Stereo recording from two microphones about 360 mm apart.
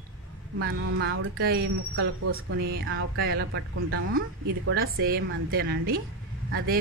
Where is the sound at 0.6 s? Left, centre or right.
Right.